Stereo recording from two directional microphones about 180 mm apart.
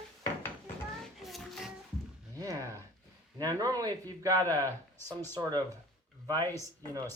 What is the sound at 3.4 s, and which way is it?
A man's voice, 20° right (ahead or behind).